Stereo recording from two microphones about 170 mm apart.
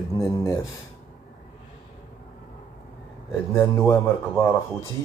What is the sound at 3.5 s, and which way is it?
Speech, 15° left (ahead or behind).